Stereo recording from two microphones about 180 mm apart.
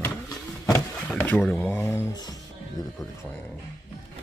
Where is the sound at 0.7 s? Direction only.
15° left (ahead or behind).